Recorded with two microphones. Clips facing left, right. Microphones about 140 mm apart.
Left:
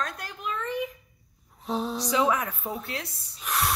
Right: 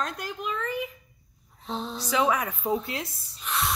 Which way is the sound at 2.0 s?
5° right (ahead or behind).